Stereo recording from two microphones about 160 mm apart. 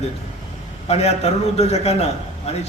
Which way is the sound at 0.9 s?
40° left (ahead or behind).